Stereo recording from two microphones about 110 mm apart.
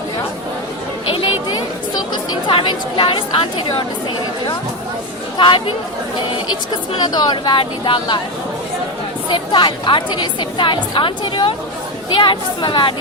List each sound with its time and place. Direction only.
2.3 s a woman's voice: 50° left (ahead or behind)
5.4 s a woman's voice: 45° left (ahead or behind)
7.0 s a woman's voice: 40° left (ahead or behind)
9.3 s a woman's voice: 45° left (ahead or behind)